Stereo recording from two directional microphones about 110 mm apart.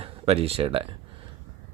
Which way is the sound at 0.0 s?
65° right (ahead or behind).